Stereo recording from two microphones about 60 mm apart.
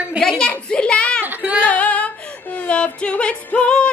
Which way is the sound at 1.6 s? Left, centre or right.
Left.